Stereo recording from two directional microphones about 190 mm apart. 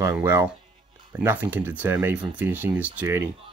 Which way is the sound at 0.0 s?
15° right (ahead or behind).